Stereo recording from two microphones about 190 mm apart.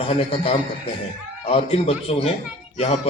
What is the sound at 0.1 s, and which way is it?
A man's voice, 30° left (ahead or behind).